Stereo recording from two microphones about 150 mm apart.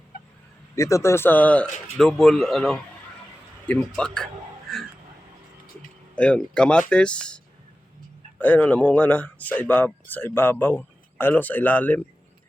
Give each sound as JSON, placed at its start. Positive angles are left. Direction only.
{"t": 0.8, "sound": "speech", "side_deg": 20}
{"t": 4.7, "sound": "a sound", "side_deg": 5}
{"t": 6.1, "sound": "speech", "side_deg": 5}